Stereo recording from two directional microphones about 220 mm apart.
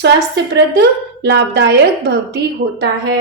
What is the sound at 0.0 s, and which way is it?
A woman's voice, 50° right (ahead or behind).